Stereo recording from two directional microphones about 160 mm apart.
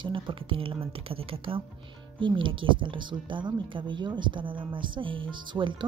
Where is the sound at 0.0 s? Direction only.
30° right (ahead or behind).